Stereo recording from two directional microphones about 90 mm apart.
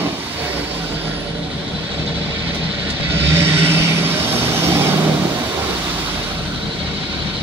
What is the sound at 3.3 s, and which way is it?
Vehicle, 25° right (ahead or behind).